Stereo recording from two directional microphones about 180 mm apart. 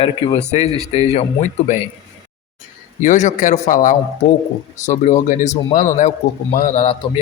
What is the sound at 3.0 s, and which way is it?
Speech, 45° left (ahead or behind).